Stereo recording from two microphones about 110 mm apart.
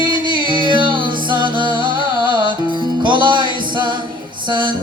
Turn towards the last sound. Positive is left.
turn(degrees=-45)  # may be behind; listen again after turning